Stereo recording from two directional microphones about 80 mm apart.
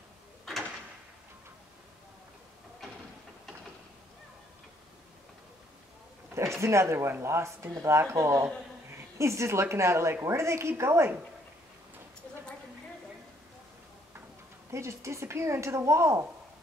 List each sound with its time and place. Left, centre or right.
6.6 s speech: right
14.7 s speech: right